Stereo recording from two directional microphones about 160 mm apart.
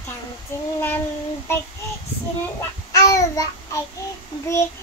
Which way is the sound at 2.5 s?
20° left (ahead or behind).